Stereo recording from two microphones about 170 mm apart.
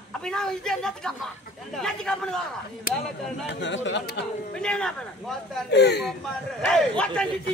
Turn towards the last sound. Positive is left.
turn(degrees=5)  # may be behind; listen again after turning